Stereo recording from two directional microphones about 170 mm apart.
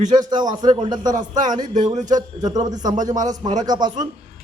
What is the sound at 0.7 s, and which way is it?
Speech, 30° right (ahead or behind).